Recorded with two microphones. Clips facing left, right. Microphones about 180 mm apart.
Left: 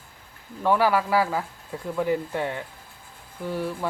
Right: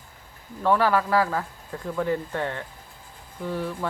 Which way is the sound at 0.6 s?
5° left (ahead or behind).